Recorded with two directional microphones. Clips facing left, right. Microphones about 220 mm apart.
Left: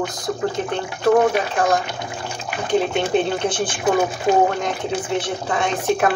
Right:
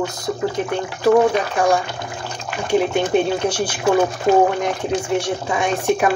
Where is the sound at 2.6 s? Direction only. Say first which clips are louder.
Right 2 dB; 10° right (ahead or behind).